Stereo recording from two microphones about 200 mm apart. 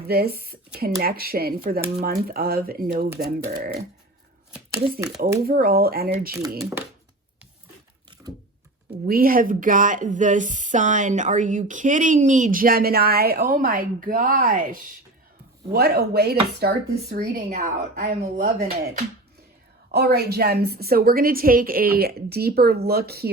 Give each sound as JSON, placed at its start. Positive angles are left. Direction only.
{"t": 0.1, "sound": "a woman's voice", "side_deg": -50}
{"t": 4.5, "sound": "speech", "side_deg": -15}
{"t": 5.5, "sound": "a woman's voice", "side_deg": -45}
{"t": 6.6, "sound": "speech", "side_deg": -15}
{"t": 8.1, "sound": "computer keyboard", "side_deg": -25}
{"t": 9.0, "sound": "a woman's voice", "side_deg": -45}
{"t": 19.9, "sound": "a woman's voice", "side_deg": -55}